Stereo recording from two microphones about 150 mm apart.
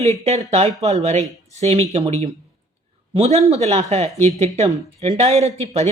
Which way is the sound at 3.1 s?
45° right (ahead or behind).